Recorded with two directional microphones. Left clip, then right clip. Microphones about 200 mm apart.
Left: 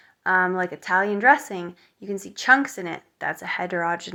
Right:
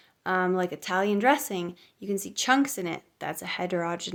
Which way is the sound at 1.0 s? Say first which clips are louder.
Left 5 dB; 60° right (ahead or behind).